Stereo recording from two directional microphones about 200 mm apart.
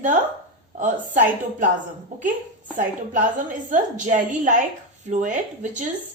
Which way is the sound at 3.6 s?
40° right (ahead or behind).